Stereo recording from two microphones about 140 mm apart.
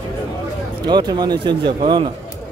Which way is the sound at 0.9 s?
30° right (ahead or behind).